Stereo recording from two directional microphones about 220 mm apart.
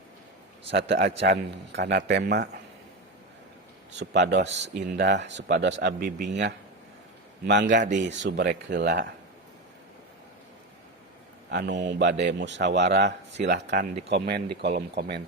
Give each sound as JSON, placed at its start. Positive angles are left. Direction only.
{"t": 0.7, "sound": "speech", "side_deg": -50}
{"t": 4.0, "sound": "speech", "side_deg": -50}
{"t": 7.7, "sound": "speech", "side_deg": -35}
{"t": 8.2, "sound": "speech", "side_deg": -50}
{"t": 11.5, "sound": "speech", "side_deg": -50}